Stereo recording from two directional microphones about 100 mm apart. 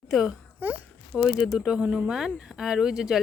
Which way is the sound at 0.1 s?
5° right (ahead or behind).